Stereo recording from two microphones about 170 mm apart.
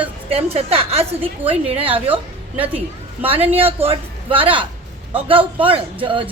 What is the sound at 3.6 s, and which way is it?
A man's voice, 35° right (ahead or behind).